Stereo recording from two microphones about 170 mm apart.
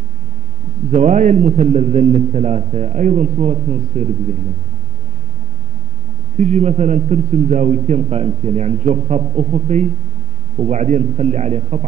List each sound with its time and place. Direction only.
0.9 s a man's voice: 45° right (ahead or behind)
6.3 s a man's voice: 45° right (ahead or behind)